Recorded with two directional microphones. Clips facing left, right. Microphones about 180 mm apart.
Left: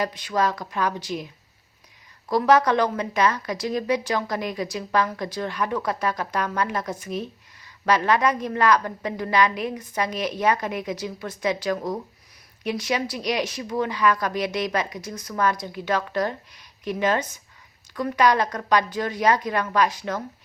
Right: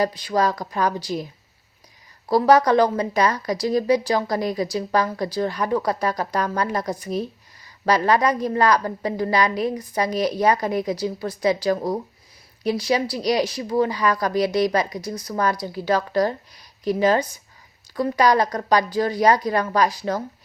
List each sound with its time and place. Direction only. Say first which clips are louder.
0.0 s speech: right 3 dB; 35° right (ahead or behind)
2.3 s speech: right 3 dB; 35° right (ahead or behind)